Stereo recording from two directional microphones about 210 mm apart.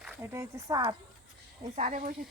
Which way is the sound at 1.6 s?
35° right (ahead or behind).